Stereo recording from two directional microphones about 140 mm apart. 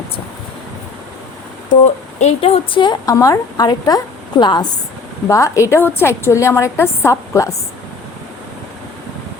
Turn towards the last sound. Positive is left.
turn(degrees=20)  # may be behind; listen again after turning